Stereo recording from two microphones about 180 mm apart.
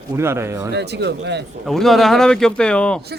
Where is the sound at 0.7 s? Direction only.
70° right (ahead or behind).